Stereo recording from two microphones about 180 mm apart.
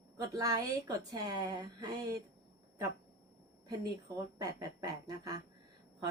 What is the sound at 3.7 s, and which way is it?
A woman's voice, 20° right (ahead or behind).